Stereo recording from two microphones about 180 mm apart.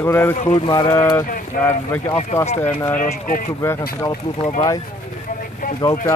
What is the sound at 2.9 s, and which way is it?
Speech, 50° left (ahead or behind).